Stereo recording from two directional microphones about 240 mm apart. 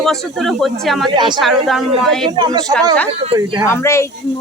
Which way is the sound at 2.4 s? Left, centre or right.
Centre.